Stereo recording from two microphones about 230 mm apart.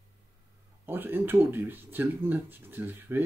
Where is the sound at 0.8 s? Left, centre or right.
Centre.